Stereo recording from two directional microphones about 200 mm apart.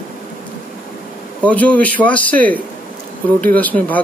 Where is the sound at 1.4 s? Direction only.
5° left (ahead or behind).